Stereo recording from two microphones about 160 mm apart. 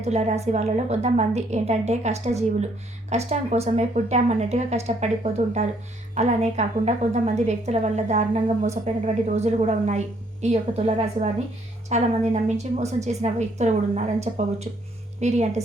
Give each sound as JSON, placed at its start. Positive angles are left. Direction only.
{"t": 0.0, "sound": "a woman's voice", "side_deg": -45}